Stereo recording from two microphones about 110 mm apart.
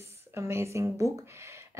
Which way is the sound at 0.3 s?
20° right (ahead or behind).